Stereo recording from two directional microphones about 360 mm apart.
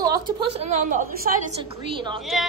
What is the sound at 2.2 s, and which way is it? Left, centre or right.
Speech, centre.